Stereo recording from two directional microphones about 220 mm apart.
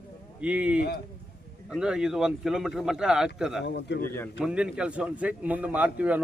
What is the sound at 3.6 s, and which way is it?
Speech, 50° left (ahead or behind).